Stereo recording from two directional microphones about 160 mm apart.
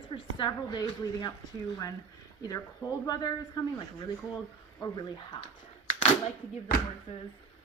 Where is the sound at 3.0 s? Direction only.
25° left (ahead or behind).